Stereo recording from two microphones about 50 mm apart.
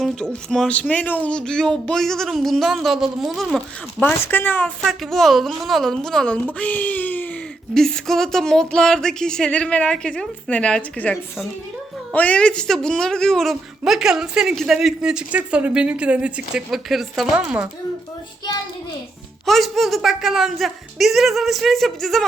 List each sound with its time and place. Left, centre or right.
0.0 s speech: centre
0.7 s speech: left
1.3 s speech: centre
4.0 s speech: left
5.1 s speech: centre
6.2 s speech: left
7.7 s speech: centre
9.5 s a woman's voice: left
12.4 s speech: centre
13.8 s a woman's voice: centre
15.3 s a woman's voice: right
16.7 s speech: centre
19.5 s speech: centre